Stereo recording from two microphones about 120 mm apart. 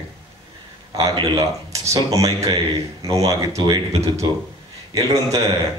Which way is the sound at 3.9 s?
60° right (ahead or behind).